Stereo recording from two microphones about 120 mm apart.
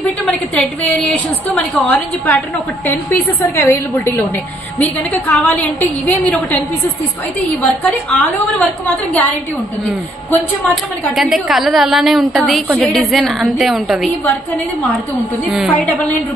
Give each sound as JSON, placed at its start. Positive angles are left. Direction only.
{"t": 0.3, "sound": "a woman's voice", "side_deg": 5}
{"t": 3.5, "sound": "a woman's voice", "side_deg": 20}
{"t": 8.1, "sound": "a woman's voice", "side_deg": 10}
{"t": 10.7, "sound": "a woman's voice", "side_deg": 0}
{"t": 15.5, "sound": "a woman's voice", "side_deg": -5}